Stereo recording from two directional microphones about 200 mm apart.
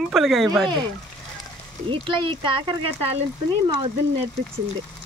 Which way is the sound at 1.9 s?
25° right (ahead or behind).